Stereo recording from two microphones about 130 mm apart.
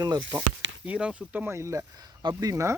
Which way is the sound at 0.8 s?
10° right (ahead or behind).